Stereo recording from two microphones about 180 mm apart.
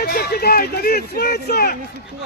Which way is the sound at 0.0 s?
60° left (ahead or behind).